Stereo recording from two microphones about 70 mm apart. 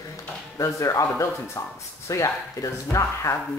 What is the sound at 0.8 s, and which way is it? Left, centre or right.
Speech, left.